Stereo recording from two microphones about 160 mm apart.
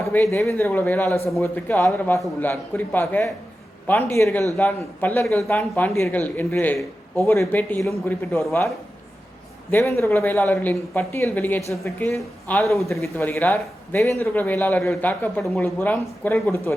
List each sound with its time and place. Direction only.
0.0 s speech: 15° left (ahead or behind)
9.7 s speech: 15° left (ahead or behind)
12.6 s a man's voice: centre (ahead or behind)
12.9 s speech: 15° left (ahead or behind)